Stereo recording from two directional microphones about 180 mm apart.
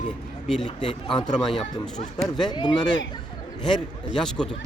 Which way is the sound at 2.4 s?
25° left (ahead or behind).